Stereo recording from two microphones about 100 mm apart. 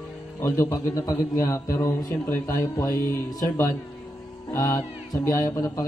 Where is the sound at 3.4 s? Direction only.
40° left (ahead or behind).